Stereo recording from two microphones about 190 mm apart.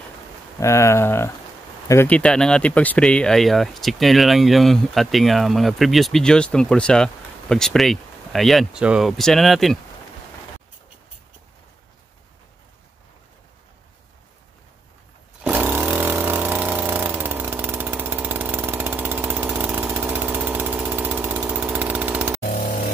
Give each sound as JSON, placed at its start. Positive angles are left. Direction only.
{"t": 0.6, "sound": "speech", "side_deg": 15}
{"t": 15.4, "sound": "chainsaw", "side_deg": -10}
{"t": 22.5, "sound": "a sound", "side_deg": 40}